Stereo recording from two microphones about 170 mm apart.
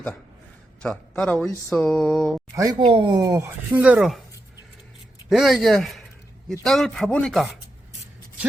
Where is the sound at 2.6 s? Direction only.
25° right (ahead or behind); by 4.2 s 5° right (ahead or behind).